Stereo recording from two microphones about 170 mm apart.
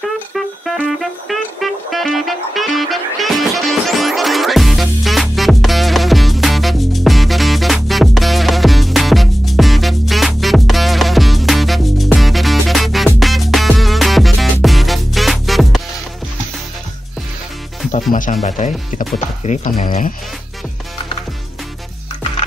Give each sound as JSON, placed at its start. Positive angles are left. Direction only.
{"t": 0.3, "sound": "music", "side_deg": 0}
{"t": 18.1, "sound": "speech", "side_deg": 50}